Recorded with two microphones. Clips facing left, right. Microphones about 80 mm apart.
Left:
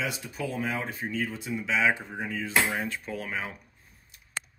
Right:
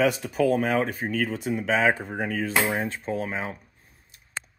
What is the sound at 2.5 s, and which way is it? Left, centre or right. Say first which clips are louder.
Cutlery: left 1 dB; right.